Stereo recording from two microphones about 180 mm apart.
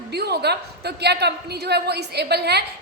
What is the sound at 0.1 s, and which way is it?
A woman's voice, 65° right (ahead or behind).